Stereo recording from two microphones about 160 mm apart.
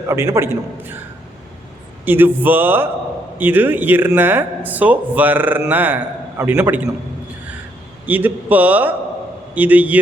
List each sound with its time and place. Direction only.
0.1 s a man's voice: 15° right (ahead or behind)
2.0 s a man's voice: 10° right (ahead or behind)
8.0 s a man's voice: 10° right (ahead or behind)